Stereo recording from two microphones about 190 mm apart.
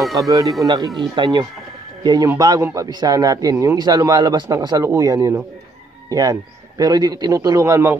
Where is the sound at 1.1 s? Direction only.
25° right (ahead or behind).